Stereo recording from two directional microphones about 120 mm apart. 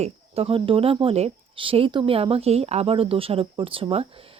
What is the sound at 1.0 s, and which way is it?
Speech, 60° right (ahead or behind).